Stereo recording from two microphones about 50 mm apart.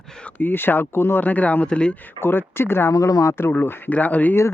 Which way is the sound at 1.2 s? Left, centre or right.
Left.